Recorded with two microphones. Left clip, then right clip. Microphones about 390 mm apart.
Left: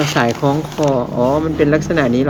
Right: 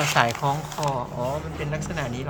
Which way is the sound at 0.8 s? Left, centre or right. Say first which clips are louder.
Left 11 dB; centre.